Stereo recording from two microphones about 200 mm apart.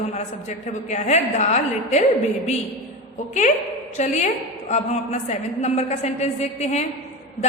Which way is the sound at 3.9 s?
35° left (ahead or behind).